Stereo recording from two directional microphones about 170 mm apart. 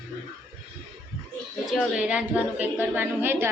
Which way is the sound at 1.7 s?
5° right (ahead or behind).